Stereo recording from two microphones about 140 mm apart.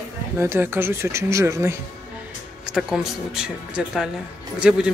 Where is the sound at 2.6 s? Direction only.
5° right (ahead or behind).